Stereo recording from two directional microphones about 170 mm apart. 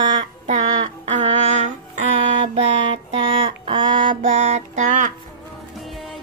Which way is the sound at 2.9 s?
30° right (ahead or behind).